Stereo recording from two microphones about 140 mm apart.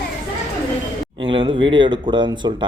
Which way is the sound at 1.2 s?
35° right (ahead or behind).